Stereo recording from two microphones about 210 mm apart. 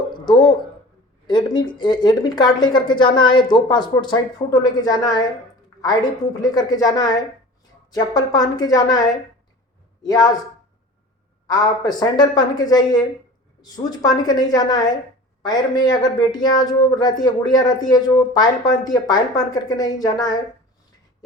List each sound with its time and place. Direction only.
0.1 s a sound: 20° left (ahead or behind)
1.3 s speech: 20° left (ahead or behind)
10.0 s speech: 20° left (ahead or behind)
11.4 s speech: 20° left (ahead or behind)